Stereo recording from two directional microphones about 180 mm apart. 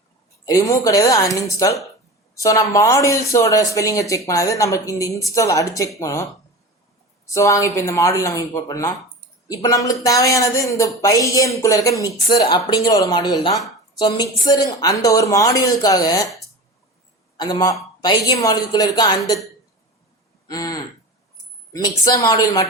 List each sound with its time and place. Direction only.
0.4 s a woman's voice: 20° left (ahead or behind)
7.3 s a woman's voice: 15° left (ahead or behind)
17.3 s a man's voice: 25° left (ahead or behind)
20.5 s a sound: 20° left (ahead or behind)
21.7 s speech: 20° left (ahead or behind)